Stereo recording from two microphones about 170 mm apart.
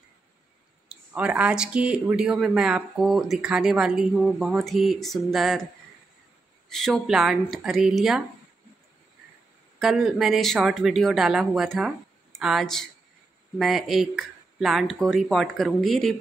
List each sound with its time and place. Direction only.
0.8 s speech: 10° right (ahead or behind)
6.7 s speech: centre (ahead or behind)
9.8 s speech: centre (ahead or behind)